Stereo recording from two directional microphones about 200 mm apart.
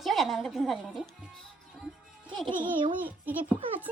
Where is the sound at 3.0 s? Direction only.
10° right (ahead or behind).